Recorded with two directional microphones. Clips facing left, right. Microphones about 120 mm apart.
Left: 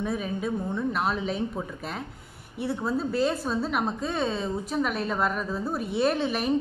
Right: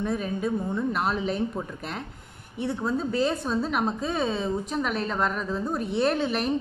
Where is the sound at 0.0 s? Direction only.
Centre (ahead or behind).